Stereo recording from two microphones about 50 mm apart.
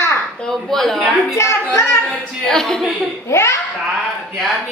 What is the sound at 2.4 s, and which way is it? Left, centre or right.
Speech, centre.